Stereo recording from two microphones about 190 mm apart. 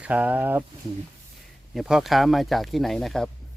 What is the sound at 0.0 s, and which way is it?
Speech, 5° right (ahead or behind).